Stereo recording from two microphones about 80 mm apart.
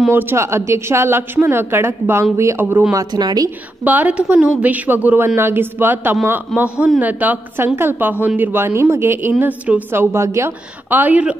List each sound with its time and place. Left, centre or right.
0.1 s a woman's voice: right
3.1 s a woman's voice: right
3.8 s a woman's voice: right
7.6 s a woman's voice: right
9.4 s a woman's voice: centre; by 10.5 s right
10.9 s a woman's voice: right